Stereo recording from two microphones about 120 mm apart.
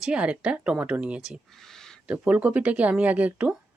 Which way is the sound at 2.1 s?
10° right (ahead or behind).